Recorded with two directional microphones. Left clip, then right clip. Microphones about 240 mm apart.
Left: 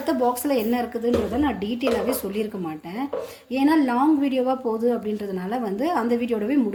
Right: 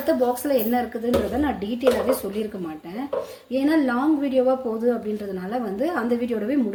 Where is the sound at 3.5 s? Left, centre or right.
Left.